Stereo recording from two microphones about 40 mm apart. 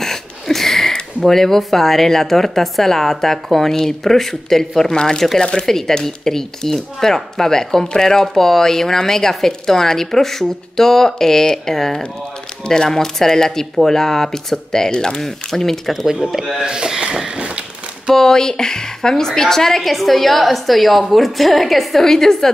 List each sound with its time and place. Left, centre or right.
0.0 s a sound: centre
1.2 s speech: centre
5.7 s speech: centre
16.3 s a woman's voice: centre
16.6 s speech: centre
17.4 s a sound: right
18.1 s a woman's voice: centre